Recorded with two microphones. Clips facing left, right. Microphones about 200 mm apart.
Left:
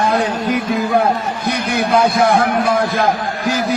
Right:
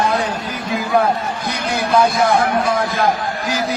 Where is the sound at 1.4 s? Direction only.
60° left (ahead or behind).